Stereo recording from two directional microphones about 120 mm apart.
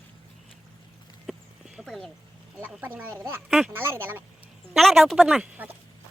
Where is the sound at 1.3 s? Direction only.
Centre (ahead or behind).